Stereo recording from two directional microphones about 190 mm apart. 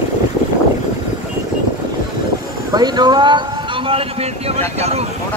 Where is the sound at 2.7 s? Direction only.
20° right (ahead or behind).